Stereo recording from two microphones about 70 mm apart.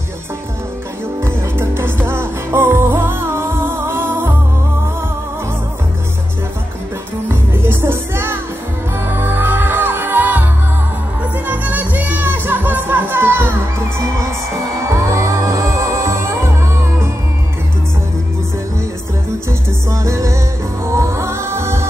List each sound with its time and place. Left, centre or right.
1.2 s music: right
7.2 s music: right
11.4 s music: right
14.0 s music: right
19.9 s music: right